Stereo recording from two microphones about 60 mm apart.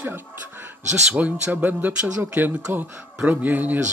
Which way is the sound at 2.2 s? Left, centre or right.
Right.